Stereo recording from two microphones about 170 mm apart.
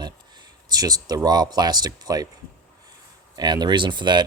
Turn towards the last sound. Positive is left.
turn(degrees=-25)  # may be behind; listen again after turning